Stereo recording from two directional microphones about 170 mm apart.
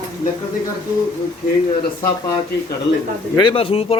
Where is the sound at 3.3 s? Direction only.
30° left (ahead or behind).